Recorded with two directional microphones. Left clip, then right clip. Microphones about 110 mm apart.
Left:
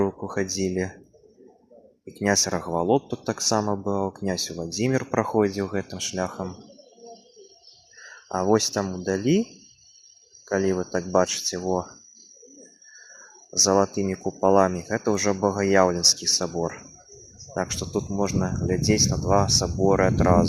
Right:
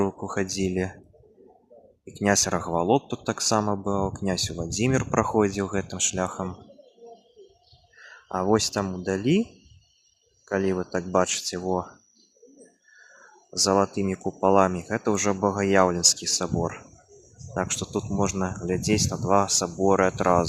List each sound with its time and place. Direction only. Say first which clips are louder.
0.2 s speech: left 1 dB; 55° right (ahead or behind)
2.2 s speech: even; 50° right (ahead or behind)
2.8 s speech: left 2 dB; 45° right (ahead or behind); by 6.6 s 65° right (ahead or behind)
8.0 s a sound: left 1 dB; 30° right (ahead or behind)
8.5 s speech: left 1 dB; 35° right (ahead or behind)
10.5 s speech: left 2 dB; 35° right (ahead or behind)
13.8 s speech: left 1 dB; 50° right (ahead or behind)
14.3 s speech: left 1 dB; 30° right (ahead or behind)
14.6 s speech: left 1 dB; 45° right (ahead or behind)